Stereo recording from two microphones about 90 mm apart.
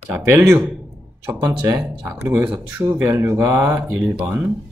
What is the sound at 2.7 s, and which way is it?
Speech, 20° right (ahead or behind).